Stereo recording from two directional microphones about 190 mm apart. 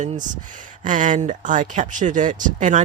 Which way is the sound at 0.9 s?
45° right (ahead or behind).